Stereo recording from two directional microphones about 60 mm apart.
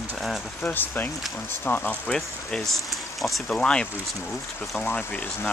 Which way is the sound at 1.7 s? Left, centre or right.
Centre.